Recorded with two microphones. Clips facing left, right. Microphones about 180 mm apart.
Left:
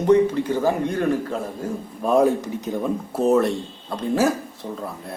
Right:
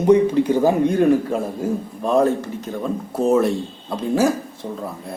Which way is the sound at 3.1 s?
Centre (ahead or behind).